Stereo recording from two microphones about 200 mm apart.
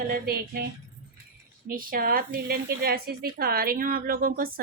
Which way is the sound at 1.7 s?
45° right (ahead or behind).